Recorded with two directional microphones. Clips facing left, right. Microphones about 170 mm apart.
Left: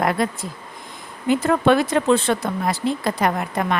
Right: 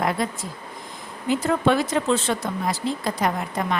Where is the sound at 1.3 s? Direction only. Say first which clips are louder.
Left 4 dB; 60° left (ahead or behind).